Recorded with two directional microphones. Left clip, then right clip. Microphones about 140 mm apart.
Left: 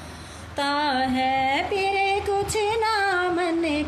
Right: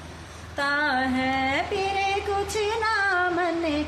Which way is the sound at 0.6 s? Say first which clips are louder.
Left 1 dB; 50° left (ahead or behind).